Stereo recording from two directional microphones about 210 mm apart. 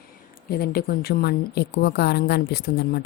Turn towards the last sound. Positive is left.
turn(degrees=50)  # may be behind; listen again after turning